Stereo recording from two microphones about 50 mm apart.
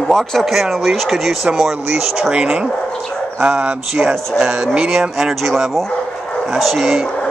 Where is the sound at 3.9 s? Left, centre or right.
Centre.